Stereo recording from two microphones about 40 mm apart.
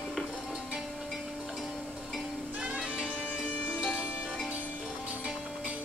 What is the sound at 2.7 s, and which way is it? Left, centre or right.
Music, right.